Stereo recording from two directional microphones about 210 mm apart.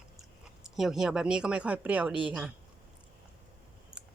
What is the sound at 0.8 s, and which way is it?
Speech, centre (ahead or behind).